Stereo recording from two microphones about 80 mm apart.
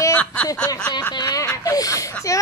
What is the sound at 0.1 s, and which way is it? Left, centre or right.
Speech, centre.